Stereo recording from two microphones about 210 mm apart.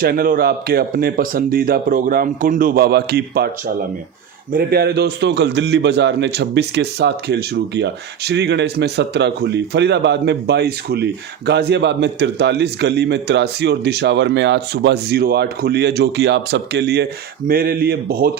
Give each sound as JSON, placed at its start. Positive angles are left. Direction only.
{"t": 0.0, "sound": "a man's voice", "side_deg": -45}